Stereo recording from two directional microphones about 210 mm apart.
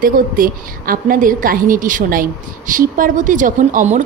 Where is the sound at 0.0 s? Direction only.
40° right (ahead or behind).